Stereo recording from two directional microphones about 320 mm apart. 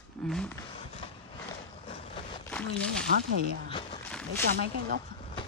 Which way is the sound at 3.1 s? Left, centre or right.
Right.